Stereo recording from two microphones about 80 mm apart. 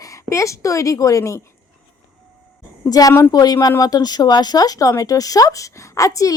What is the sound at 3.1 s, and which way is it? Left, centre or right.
Speech, left.